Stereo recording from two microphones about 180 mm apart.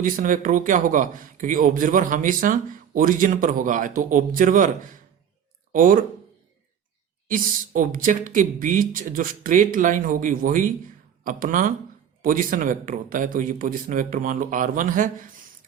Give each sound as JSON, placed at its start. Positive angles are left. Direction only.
{"t": 0.0, "sound": "a man's voice", "side_deg": -50}
{"t": 5.7, "sound": "a man's voice", "side_deg": -50}
{"t": 7.3, "sound": "a man's voice", "side_deg": -50}